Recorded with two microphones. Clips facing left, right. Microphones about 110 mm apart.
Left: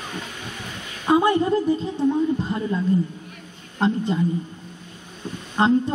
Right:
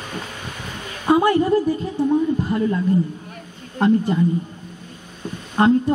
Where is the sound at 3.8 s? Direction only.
25° left (ahead or behind).